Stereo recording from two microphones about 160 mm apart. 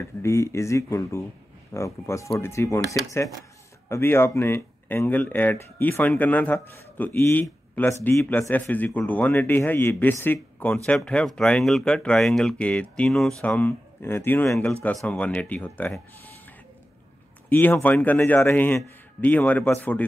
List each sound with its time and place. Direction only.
0.2 s speech: 15° left (ahead or behind)
17.5 s speech: 10° left (ahead or behind)